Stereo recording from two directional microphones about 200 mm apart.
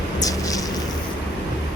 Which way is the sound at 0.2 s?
15° left (ahead or behind).